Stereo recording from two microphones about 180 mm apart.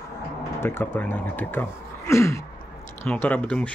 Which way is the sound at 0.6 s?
10° left (ahead or behind).